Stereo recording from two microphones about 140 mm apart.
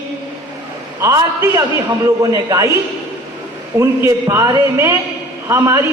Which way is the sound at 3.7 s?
20° right (ahead or behind).